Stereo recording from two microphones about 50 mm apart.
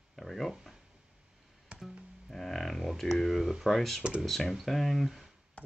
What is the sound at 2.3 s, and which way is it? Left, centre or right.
Speech, centre.